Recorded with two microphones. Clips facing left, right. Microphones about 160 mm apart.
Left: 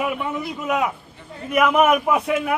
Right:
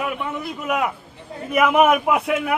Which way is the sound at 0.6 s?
Centre (ahead or behind).